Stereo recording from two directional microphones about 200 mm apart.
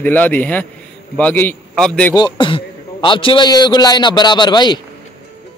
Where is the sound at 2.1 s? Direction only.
20° left (ahead or behind).